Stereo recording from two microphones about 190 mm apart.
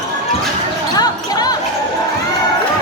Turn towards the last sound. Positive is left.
turn(degrees=20)  # may be behind; listen again after turning